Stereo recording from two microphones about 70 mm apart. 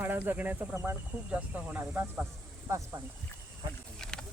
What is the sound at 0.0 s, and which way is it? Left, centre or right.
Speech, right.